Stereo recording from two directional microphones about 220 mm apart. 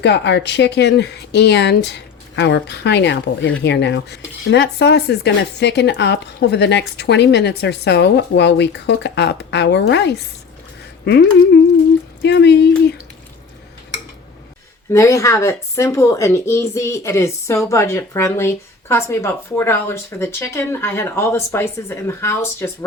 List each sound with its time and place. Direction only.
0.0 s speech: 50° left (ahead or behind)
14.9 s speech: 15° left (ahead or behind)